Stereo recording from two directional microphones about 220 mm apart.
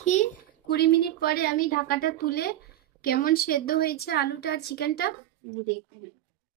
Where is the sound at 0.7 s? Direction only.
50° left (ahead or behind).